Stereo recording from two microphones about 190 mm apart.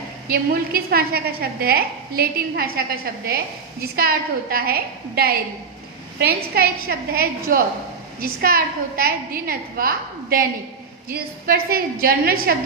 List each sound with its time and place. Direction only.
0.3 s a woman's voice: 50° right (ahead or behind)